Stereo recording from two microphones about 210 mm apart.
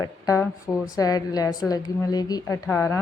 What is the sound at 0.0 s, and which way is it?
A woman's voice, 15° left (ahead or behind).